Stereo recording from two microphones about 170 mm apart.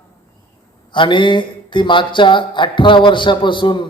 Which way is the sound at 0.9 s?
30° left (ahead or behind).